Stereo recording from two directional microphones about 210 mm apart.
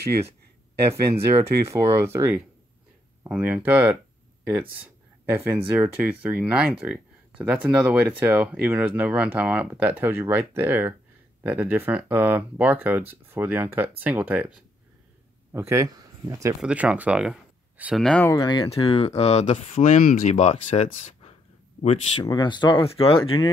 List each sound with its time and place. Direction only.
1.7 s speech: 15° right (ahead or behind)
15.5 s speech: 10° right (ahead or behind); by 18.3 s 5° left (ahead or behind)
18.3 s speech: 20° left (ahead or behind)